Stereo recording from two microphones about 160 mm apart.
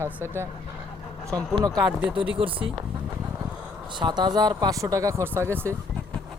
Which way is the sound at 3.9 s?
30° right (ahead or behind).